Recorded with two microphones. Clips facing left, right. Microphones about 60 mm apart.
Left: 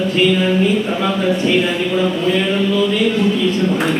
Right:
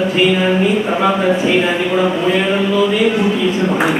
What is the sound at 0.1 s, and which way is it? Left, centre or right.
A man's voice, centre.